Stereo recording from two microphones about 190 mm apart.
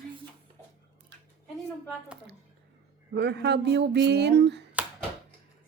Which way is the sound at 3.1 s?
60° right (ahead or behind).